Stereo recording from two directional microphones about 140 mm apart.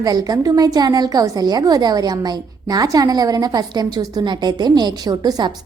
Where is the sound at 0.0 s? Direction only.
25° right (ahead or behind).